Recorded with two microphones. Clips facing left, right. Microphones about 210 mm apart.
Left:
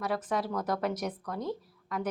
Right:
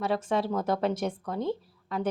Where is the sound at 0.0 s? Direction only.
25° right (ahead or behind).